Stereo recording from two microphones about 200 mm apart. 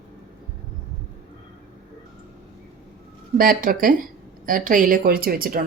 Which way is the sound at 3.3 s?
45° right (ahead or behind).